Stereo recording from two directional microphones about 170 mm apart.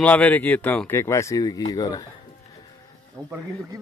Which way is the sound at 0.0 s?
10° left (ahead or behind).